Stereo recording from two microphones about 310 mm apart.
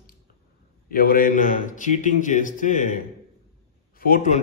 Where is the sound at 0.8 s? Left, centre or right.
Left.